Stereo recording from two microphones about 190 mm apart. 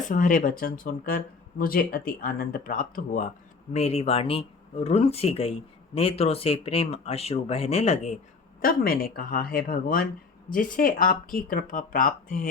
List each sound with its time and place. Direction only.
0.0 s speech: 45° left (ahead or behind)
3.7 s speech: 35° left (ahead or behind)
8.6 s speech: 50° left (ahead or behind)